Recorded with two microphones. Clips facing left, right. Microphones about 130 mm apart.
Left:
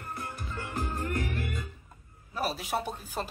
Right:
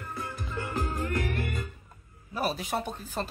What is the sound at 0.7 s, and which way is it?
Music, 90° right.